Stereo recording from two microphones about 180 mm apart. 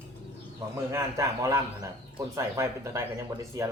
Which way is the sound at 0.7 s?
15° right (ahead or behind).